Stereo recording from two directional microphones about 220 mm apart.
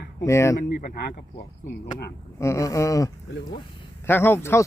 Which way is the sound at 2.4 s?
15° left (ahead or behind).